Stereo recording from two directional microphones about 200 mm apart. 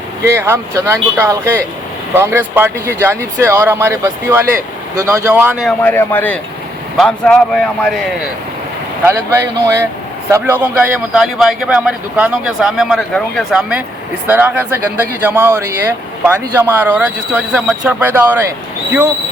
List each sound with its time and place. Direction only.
0.3 s speech: 15° right (ahead or behind)
5.6 s a man's voice: 10° left (ahead or behind)
9.0 s a man's voice: 15° right (ahead or behind)